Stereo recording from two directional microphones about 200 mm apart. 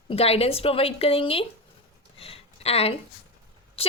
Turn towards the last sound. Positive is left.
turn(degrees=30)  # may be behind; listen again after turning